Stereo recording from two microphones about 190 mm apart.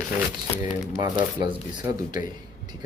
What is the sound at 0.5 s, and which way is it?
Speech, 10° right (ahead or behind).